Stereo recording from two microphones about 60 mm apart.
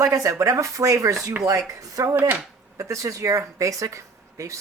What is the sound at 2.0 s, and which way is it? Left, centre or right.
Speech, right.